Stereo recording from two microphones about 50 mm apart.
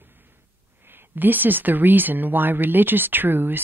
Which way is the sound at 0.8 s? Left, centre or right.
Right.